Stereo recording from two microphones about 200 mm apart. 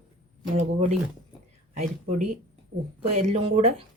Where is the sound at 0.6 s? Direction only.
35° right (ahead or behind).